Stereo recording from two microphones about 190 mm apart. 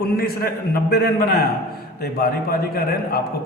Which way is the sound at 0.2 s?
55° left (ahead or behind).